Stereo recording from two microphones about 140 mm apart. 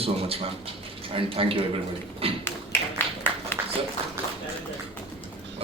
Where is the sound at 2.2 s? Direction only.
45° right (ahead or behind).